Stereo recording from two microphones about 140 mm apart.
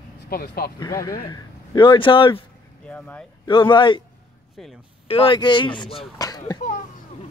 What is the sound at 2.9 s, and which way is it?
Speech, 10° left (ahead or behind).